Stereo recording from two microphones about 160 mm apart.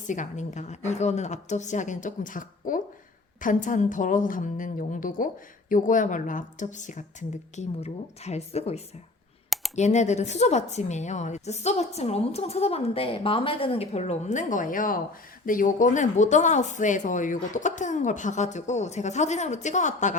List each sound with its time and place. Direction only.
0.1 s a woman's voice: 50° left (ahead or behind)